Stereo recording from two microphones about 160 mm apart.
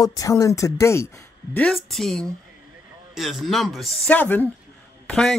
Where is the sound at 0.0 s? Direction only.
20° left (ahead or behind).